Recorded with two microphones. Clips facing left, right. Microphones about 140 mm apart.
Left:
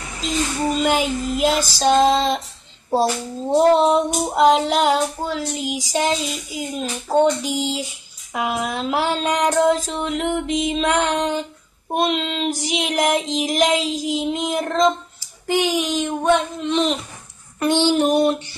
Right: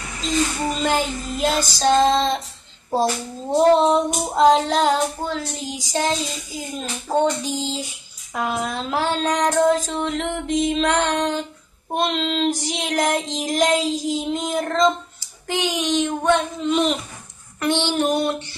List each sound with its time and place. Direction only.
0.8 s child singing: 5° left (ahead or behind)
3.7 s child singing: 5° left (ahead or behind)
17.6 s child singing: 20° left (ahead or behind)